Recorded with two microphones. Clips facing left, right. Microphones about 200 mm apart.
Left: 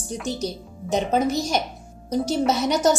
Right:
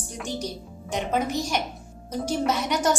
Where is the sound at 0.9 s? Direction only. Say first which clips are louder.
Left 5 dB; 35° left (ahead or behind).